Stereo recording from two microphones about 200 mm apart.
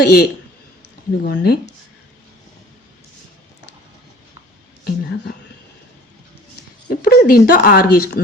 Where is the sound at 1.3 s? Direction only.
55° left (ahead or behind).